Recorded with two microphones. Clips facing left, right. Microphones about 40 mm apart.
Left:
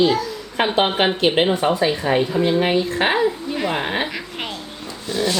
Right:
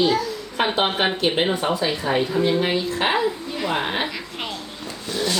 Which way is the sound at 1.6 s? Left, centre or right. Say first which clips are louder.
Left 4 dB; left.